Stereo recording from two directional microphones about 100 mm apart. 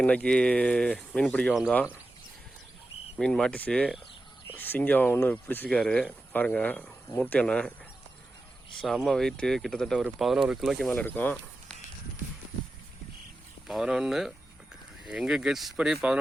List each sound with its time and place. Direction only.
0.0 s speech: 10° left (ahead or behind)
3.2 s speech: 5° left (ahead or behind)
8.8 s speech: 5° left (ahead or behind)
10.9 s speech: 20° left (ahead or behind)
13.7 s speech: 5° right (ahead or behind)